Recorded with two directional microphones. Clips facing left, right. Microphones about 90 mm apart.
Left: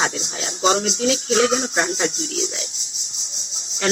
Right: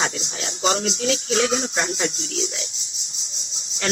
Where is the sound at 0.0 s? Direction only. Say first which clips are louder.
Left 2 dB; 15° left (ahead or behind).